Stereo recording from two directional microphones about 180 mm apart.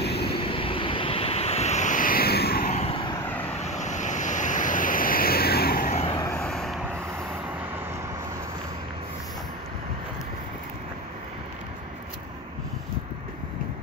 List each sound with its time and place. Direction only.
0.0 s vehicle: 65° left (ahead or behind)
0.4 s vehicle: 30° left (ahead or behind); by 2.7 s 60° left (ahead or behind)
2.7 s vehicle: 35° left (ahead or behind)
3.6 s waves: 40° left (ahead or behind); by 5.9 s 55° left (ahead or behind)
6.1 s vehicle: 15° left (ahead or behind)
6.4 s vehicle: centre (ahead or behind)